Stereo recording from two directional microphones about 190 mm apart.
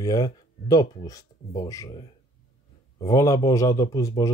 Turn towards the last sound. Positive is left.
turn(degrees=20)  # may be behind; listen again after turning